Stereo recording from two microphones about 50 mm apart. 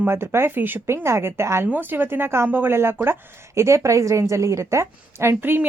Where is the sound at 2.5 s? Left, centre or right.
Right.